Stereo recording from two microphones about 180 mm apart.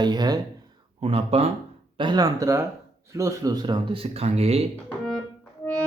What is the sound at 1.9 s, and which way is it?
Mantra, 25° right (ahead or behind).